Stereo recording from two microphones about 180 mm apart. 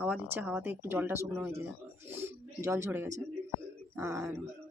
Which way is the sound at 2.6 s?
15° right (ahead or behind).